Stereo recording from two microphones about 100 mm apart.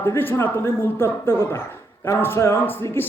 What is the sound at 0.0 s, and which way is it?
A man's voice, 20° left (ahead or behind).